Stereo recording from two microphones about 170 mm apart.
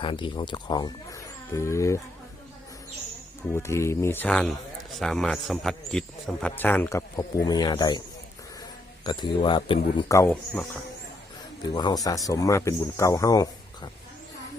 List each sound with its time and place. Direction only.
0.0 s speech: 30° left (ahead or behind)
3.5 s a man's voice: 15° left (ahead or behind)
9.0 s speech: 30° left (ahead or behind)
10.1 s speech: 15° left (ahead or behind)
11.6 s speech: 25° left (ahead or behind)